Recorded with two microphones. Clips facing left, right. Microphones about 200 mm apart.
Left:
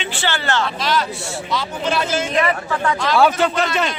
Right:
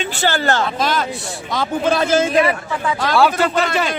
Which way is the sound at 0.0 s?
40° right (ahead or behind).